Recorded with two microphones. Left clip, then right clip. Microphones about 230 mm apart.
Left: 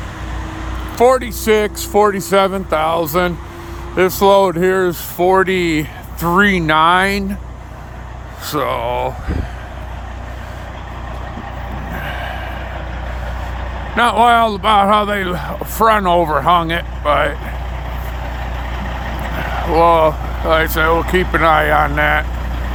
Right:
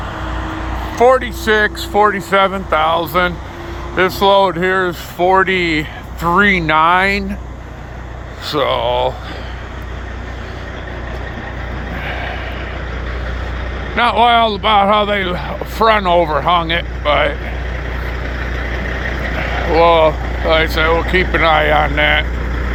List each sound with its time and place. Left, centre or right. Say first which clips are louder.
0.9 s speech: right 1 dB; left
8.4 s speech: right 3 dB; left
12.0 s vehicle: right 2 dB; left
13.9 s speech: even; left
19.7 s speech: right 1 dB; left